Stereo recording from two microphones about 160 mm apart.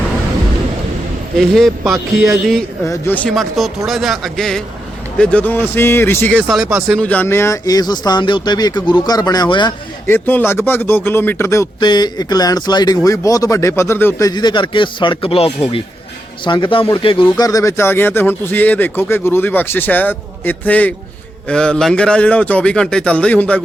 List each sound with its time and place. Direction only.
1.4 s speech: centre (ahead or behind)
2.8 s speech: 15° left (ahead or behind)
3.2 s speech: centre (ahead or behind)
6.3 s speech: centre (ahead or behind)
7.0 s speech: 10° left (ahead or behind); by 9.7 s 30° left (ahead or behind)
10.1 s speech: 10° left (ahead or behind); by 17.2 s 35° left (ahead or behind)
17.3 s speech: 20° left (ahead or behind)